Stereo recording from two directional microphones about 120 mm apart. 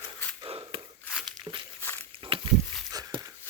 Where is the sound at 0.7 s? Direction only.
45° right (ahead or behind).